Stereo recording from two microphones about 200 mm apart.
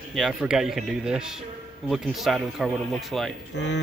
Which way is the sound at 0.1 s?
Centre (ahead or behind).